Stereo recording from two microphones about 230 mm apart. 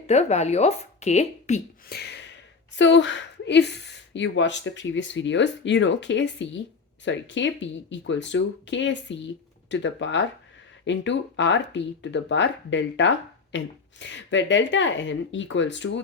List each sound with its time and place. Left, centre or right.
0.1 s speech: left
1.9 s a sound: left
2.7 s speech: left